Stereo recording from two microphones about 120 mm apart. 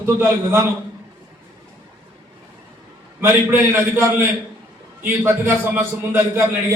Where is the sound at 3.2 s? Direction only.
20° right (ahead or behind).